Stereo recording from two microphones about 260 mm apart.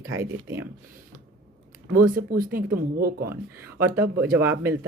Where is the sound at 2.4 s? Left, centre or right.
Right.